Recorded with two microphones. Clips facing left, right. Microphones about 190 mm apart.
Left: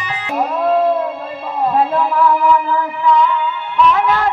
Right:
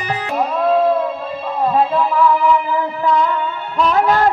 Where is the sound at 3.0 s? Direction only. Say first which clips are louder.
Left 3 dB; 40° right (ahead or behind).